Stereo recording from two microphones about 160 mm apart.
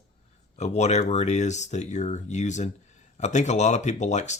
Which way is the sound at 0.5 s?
45° left (ahead or behind).